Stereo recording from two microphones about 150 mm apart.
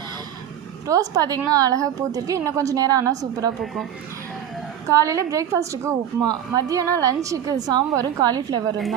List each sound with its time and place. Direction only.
0.9 s a woman's voice: 25° right (ahead or behind)
4.9 s a woman's voice: 20° right (ahead or behind)